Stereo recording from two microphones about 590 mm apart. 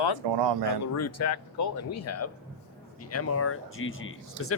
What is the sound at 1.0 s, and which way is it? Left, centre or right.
Speech, left.